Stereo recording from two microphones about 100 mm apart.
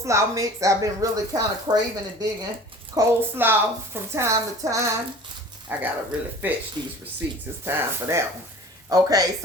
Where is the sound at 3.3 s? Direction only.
20° right (ahead or behind).